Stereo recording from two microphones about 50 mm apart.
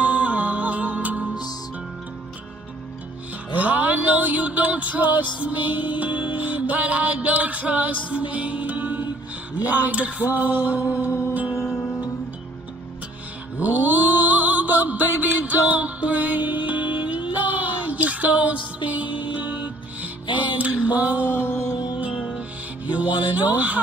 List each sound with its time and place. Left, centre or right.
0.0 s music: right
3.5 s music: right
11.1 s music: left
13.6 s mantra: right
21.3 s music: left
22.8 s speech: right